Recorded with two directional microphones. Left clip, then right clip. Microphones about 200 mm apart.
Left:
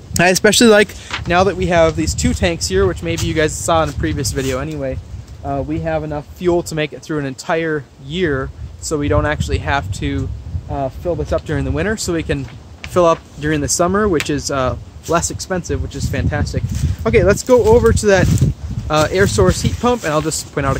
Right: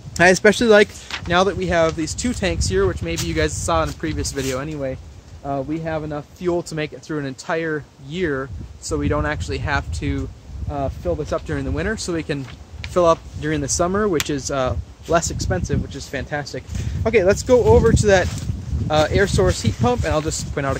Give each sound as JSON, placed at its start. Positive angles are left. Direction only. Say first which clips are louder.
{"t": 0.1, "sound": "speech", "louder": "left 1 dB", "side_deg": 40}
{"t": 1.2, "sound": "speech", "louder": "left 4 dB", "side_deg": 15}